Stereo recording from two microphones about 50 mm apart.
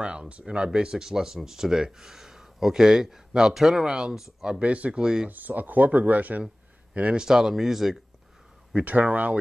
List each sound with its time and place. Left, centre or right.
0.0 s speech: right
4.6 s speech: right
5.0 s speech: centre
5.3 s speech: right
7.2 s speech: centre
8.7 s speech: right